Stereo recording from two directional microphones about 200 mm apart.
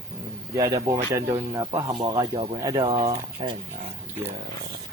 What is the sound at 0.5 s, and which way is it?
Speech, 20° right (ahead or behind).